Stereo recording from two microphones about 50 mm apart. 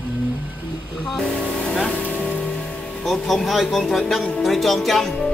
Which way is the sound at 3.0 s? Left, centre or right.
Centre.